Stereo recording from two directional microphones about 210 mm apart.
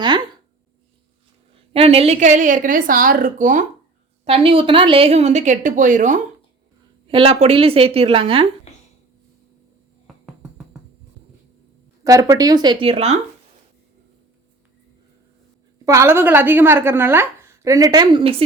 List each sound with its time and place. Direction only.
1.7 s a woman's voice: 30° right (ahead or behind)
4.3 s a woman's voice: 25° right (ahead or behind)
7.1 s a woman's voice: 25° right (ahead or behind)
12.0 s a woman's voice: 15° right (ahead or behind)
15.9 s a woman's voice: 10° right (ahead or behind)